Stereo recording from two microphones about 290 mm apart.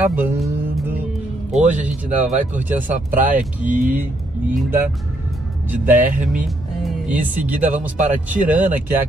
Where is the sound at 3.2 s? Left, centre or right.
Right.